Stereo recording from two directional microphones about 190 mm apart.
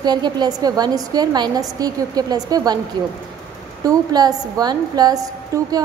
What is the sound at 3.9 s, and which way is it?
A woman's voice, 20° right (ahead or behind).